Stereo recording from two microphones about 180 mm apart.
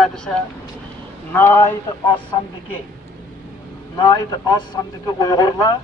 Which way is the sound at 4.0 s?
20° left (ahead or behind).